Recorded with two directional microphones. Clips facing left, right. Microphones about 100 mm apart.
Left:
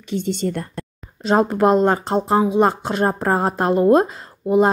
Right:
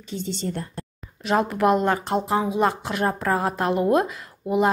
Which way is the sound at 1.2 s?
30° left (ahead or behind).